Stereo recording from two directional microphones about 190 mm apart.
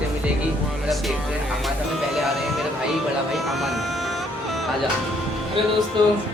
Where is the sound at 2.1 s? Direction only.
Centre (ahead or behind).